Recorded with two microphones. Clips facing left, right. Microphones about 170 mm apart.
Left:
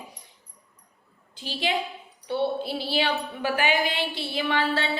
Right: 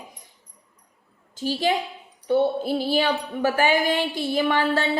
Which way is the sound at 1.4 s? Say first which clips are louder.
Right 5 dB; 45° right (ahead or behind).